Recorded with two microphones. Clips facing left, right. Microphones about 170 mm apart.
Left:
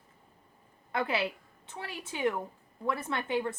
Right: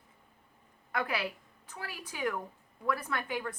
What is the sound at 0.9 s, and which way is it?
A woman's voice, 25° left (ahead or behind).